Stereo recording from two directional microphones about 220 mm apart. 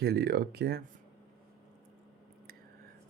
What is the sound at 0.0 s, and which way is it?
Speech, 45° right (ahead or behind).